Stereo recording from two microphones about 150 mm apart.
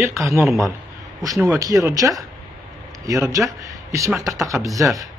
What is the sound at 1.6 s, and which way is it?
Speech, 20° right (ahead or behind).